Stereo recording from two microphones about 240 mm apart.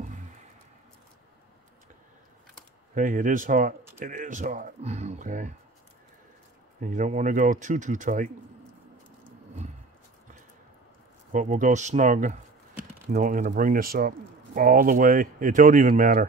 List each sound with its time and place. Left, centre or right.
2.9 s speech: right
6.8 s speech: right
11.3 s speech: right